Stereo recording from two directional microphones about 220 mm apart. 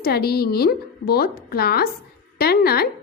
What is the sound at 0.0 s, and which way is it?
A woman's voice, 45° left (ahead or behind).